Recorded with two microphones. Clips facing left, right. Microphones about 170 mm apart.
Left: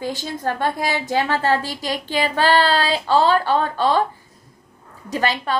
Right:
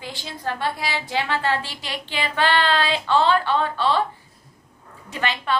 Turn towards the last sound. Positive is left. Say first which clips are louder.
# left 3 dB
turn(degrees=40)  # may be behind; listen again after turning